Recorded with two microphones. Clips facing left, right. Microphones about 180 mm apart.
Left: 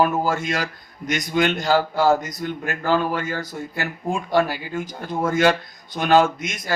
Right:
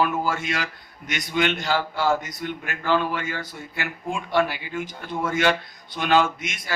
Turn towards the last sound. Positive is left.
turn(degrees=45)  # may be behind; listen again after turning